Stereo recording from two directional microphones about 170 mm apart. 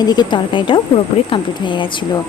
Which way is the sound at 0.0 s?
25° left (ahead or behind).